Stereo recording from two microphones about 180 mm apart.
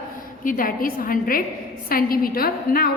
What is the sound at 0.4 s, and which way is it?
A woman's voice, 50° left (ahead or behind).